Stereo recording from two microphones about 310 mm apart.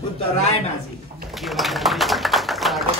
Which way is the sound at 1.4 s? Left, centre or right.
Centre.